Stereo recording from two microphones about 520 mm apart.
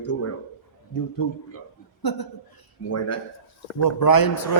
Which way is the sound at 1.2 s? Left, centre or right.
Left.